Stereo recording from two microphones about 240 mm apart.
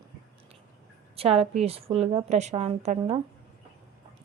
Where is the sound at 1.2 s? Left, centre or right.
Right.